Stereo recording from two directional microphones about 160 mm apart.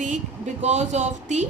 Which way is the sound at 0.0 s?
50° right (ahead or behind).